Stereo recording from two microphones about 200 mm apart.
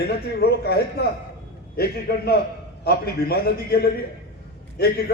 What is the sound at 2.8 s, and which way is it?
Speech, 50° left (ahead or behind).